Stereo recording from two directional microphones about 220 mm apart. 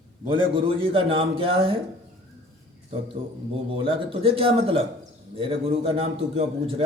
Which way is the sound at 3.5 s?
25° right (ahead or behind).